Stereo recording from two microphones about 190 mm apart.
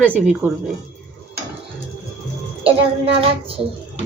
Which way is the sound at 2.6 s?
30° right (ahead or behind).